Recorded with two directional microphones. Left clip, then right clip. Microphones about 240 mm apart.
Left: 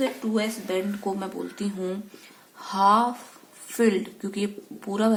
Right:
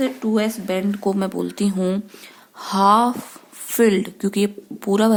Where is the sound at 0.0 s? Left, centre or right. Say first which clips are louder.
Right 5 dB; right.